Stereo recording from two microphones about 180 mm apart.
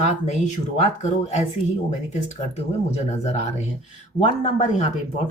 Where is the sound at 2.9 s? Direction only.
35° left (ahead or behind).